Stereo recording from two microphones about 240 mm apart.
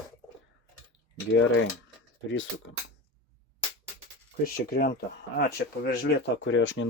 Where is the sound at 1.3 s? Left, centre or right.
Left.